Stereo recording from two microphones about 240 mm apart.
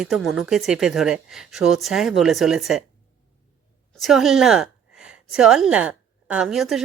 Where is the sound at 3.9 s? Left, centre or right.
Centre.